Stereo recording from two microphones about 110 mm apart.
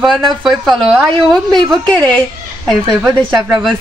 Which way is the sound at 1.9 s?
10° left (ahead or behind).